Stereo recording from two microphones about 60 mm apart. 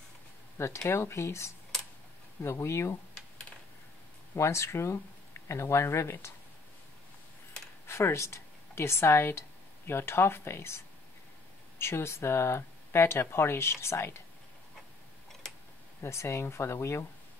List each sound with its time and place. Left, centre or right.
0.6 s speech: left
4.4 s speech: left
7.8 s speech: left
11.8 s speech: left
16.0 s speech: left